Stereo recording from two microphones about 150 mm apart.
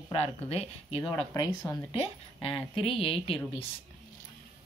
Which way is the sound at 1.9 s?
40° left (ahead or behind).